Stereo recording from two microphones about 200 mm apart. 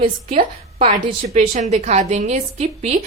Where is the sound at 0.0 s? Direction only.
45° right (ahead or behind).